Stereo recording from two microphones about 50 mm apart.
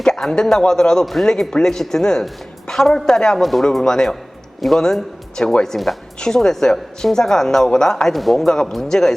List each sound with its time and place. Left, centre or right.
0.0 s speech: centre
3.3 s speech: centre